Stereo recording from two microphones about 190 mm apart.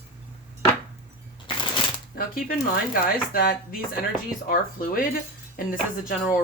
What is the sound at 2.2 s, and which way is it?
Speech, 50° left (ahead or behind).